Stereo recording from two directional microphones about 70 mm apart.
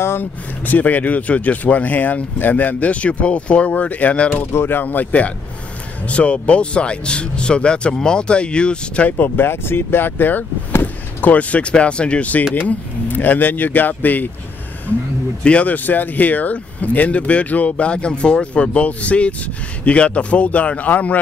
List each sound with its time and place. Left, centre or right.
0.0 s speech: left
4.5 s speech: left; by 9.1 s centre
9.1 s speech: left
15.4 s speech: centre